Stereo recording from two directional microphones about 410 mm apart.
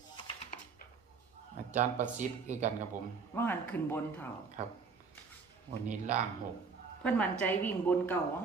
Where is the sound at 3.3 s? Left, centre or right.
Centre.